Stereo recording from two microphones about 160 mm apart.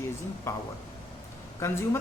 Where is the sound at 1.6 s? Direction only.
15° left (ahead or behind).